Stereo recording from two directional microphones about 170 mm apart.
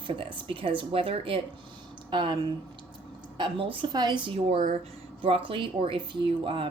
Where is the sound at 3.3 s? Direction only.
30° right (ahead or behind).